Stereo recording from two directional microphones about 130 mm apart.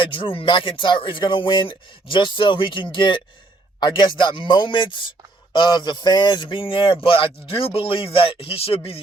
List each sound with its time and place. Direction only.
0.0 s a man's voice: 40° left (ahead or behind)